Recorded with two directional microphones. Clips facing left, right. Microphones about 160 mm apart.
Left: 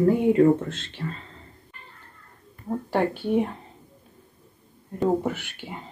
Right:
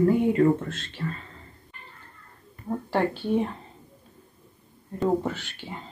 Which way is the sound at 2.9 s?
15° left (ahead or behind).